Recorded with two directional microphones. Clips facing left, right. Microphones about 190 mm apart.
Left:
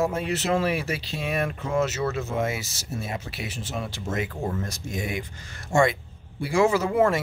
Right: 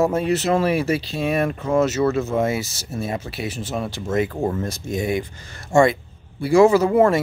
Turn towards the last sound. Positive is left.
turn(degrees=-35)  # may be behind; listen again after turning